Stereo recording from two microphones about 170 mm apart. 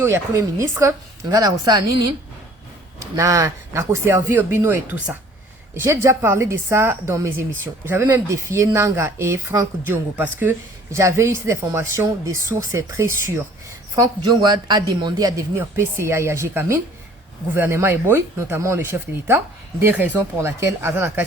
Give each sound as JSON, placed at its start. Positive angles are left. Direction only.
{"t": 0.0, "sound": "a woman's voice", "side_deg": -15}
{"t": 3.2, "sound": "a woman's voice", "side_deg": -20}